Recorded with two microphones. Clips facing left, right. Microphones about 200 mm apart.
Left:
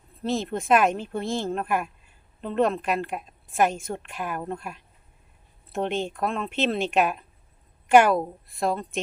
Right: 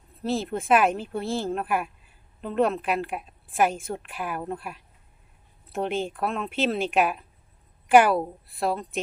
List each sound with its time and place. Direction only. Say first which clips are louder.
0.2 s speech: even; 5° right (ahead or behind)